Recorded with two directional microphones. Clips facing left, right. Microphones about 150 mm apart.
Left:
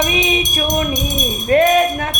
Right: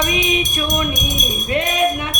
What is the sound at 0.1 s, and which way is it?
Music, 30° left (ahead or behind).